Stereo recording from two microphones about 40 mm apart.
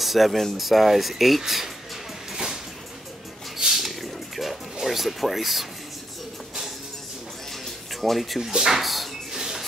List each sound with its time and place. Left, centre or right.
0.0 s speech: centre
2.3 s a sound: centre
4.8 s speech: centre
8.0 s speech: centre
8.4 s speech: centre
9.4 s a sound: centre